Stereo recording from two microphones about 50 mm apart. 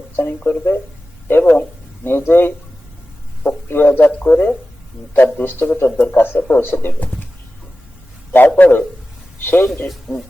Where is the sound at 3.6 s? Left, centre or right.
Left.